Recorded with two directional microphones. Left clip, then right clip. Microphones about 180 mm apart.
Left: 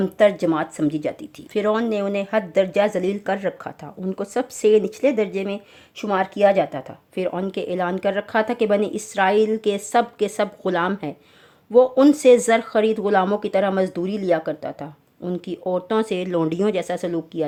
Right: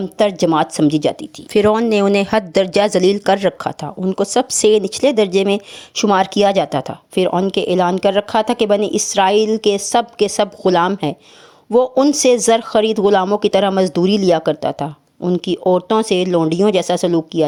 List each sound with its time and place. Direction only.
0.0 s speech: 30° right (ahead or behind)